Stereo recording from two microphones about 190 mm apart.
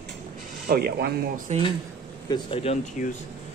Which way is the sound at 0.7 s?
55° right (ahead or behind).